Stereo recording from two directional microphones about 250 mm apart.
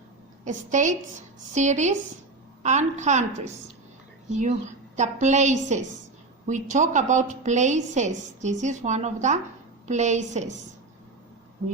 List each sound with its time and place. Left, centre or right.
0.4 s a woman's voice: right